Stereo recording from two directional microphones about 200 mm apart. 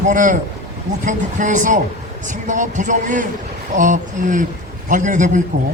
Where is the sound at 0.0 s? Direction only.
40° right (ahead or behind).